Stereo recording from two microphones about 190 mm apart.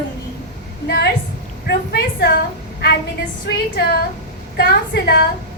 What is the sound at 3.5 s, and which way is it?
A woman's voice, 60° left (ahead or behind).